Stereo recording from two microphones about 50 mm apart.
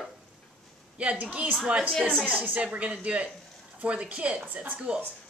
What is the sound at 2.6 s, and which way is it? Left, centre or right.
Speech, right.